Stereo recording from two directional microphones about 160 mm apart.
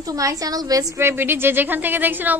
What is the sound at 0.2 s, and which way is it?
A woman's voice, 20° right (ahead or behind).